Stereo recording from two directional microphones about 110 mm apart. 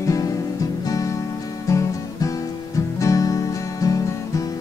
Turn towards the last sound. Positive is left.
turn(degrees=30)  # may be behind; listen again after turning